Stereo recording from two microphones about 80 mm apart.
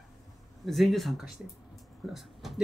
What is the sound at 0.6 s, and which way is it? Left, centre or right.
Speech, centre.